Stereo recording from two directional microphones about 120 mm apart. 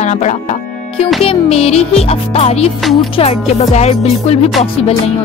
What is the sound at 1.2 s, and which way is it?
Speech, 55° left (ahead or behind).